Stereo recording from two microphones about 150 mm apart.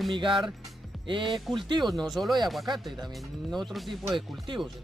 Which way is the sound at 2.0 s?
Centre (ahead or behind).